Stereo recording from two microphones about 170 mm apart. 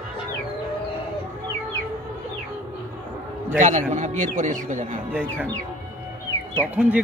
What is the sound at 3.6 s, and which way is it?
A man's voice, 45° right (ahead or behind).